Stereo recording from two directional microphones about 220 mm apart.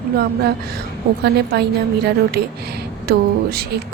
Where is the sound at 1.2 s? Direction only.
50° right (ahead or behind).